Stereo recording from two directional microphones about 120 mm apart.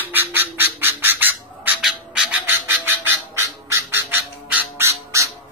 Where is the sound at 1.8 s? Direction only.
5° right (ahead or behind).